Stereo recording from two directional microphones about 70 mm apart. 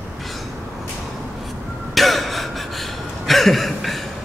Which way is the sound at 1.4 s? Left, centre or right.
Centre.